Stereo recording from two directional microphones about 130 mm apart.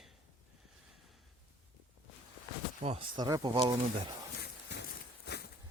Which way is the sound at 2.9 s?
30° right (ahead or behind).